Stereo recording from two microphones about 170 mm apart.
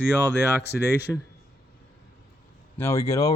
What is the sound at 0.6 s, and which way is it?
Speech, 75° left (ahead or behind).